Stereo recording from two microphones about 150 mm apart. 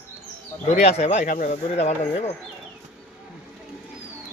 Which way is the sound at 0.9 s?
50° left (ahead or behind).